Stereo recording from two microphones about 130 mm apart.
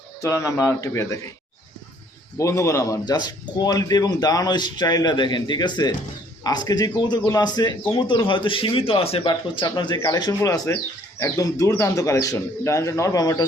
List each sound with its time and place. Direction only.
0.2 s a man's voice: 25° left (ahead or behind)
2.4 s a man's voice: 20° left (ahead or behind)